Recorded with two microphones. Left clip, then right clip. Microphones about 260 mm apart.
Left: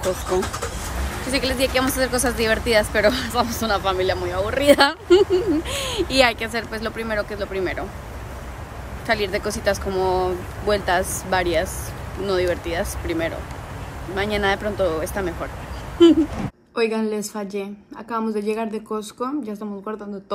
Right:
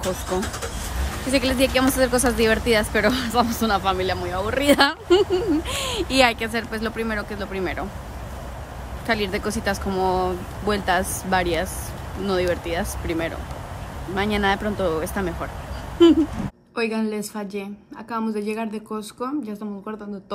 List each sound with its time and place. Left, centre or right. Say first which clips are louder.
1.3 s speech: right 1 dB; centre
9.0 s speech: left 2 dB; centre